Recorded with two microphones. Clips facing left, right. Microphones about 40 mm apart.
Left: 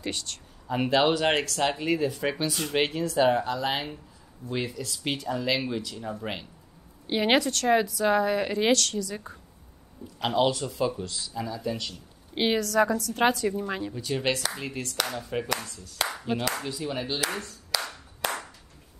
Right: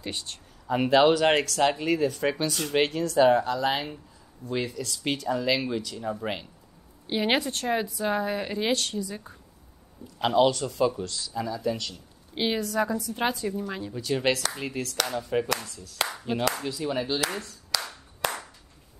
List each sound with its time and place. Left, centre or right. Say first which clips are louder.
0.0 s a woman's voice: left 2 dB; left
0.7 s speech: right 3 dB; centre
7.1 s a woman's voice: left 2 dB; left
7.8 s a woman's voice: left 4 dB; left
8.7 s a woman's voice: left 2 dB; left
10.1 s speech: right 3 dB; centre
12.4 s a woman's voice: left 3 dB; left
13.1 s a woman's voice: left 4 dB; left
13.7 s speech: left 3 dB; left
13.9 s speech: right 5 dB; centre
18.2 s clapping: right 1 dB; centre